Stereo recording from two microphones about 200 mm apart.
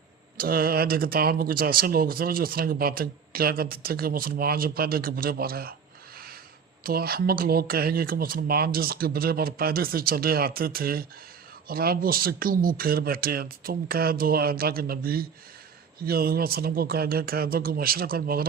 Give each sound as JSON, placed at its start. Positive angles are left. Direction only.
{"t": 0.3, "sound": "speech", "side_deg": -50}
{"t": 6.8, "sound": "speech", "side_deg": -50}